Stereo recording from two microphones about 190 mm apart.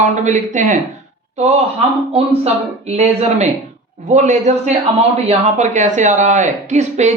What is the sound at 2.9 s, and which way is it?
A man's voice, 35° right (ahead or behind).